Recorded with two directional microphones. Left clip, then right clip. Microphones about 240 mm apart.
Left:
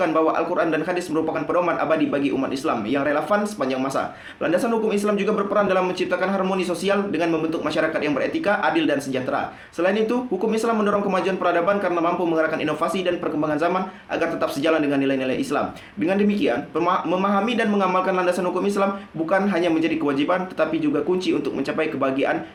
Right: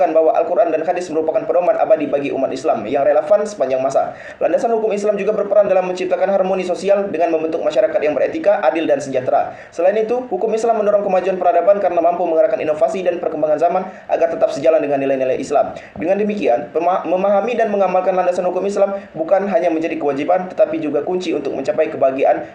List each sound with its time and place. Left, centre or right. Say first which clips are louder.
0.0 s a man's voice: right 7 dB; left
14.1 s a man's voice: right 8 dB; left
21.8 s a man's voice: right 8 dB; left